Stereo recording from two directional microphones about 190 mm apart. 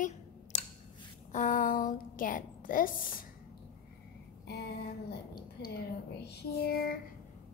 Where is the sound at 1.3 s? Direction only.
40° left (ahead or behind).